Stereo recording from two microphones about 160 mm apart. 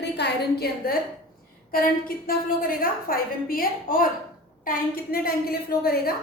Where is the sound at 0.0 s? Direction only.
85° left.